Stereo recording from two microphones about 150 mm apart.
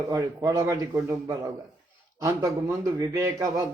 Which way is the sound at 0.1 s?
25° right (ahead or behind).